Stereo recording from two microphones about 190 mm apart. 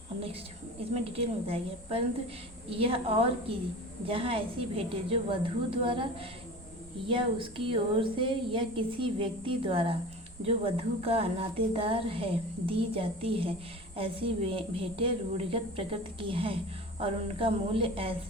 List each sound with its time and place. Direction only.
0.9 s a woman's voice: 30° right (ahead or behind)